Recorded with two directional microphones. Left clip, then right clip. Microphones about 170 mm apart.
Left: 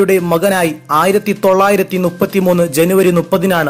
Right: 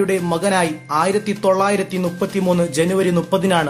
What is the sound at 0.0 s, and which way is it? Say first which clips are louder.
Speech: left 7 dB; 35° left (ahead or behind).